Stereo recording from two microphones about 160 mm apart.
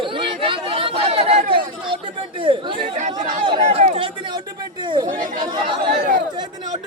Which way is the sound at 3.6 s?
40° right (ahead or behind).